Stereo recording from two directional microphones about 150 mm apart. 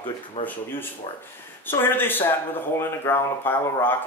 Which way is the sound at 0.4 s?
55° left (ahead or behind).